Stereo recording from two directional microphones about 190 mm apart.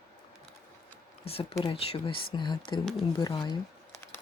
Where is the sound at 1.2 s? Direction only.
30° left (ahead or behind).